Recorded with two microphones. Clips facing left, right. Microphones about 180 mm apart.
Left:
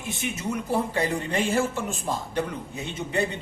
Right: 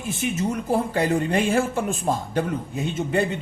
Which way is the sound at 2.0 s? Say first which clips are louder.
Right 2 dB; 50° right (ahead or behind).